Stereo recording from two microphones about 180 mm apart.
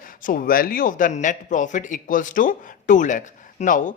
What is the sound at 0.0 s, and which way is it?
Speech, 50° left (ahead or behind).